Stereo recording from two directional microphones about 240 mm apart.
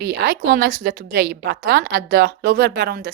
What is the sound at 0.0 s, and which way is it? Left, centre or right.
A woman's voice, right.